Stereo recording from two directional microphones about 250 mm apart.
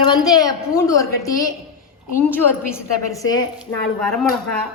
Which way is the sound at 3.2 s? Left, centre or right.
Centre.